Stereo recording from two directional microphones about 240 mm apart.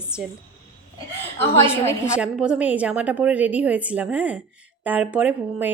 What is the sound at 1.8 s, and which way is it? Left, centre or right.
Speech, centre.